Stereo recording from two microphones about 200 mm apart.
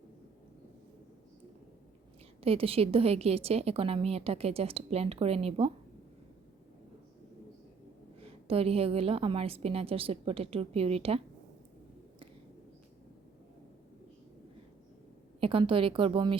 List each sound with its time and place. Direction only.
2.4 s a woman's voice: 30° right (ahead or behind)
8.2 s a woman's voice: 30° right (ahead or behind)
15.4 s a woman's voice: 25° right (ahead or behind)